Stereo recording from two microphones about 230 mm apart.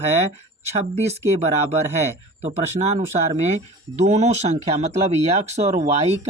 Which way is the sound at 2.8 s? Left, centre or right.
Right.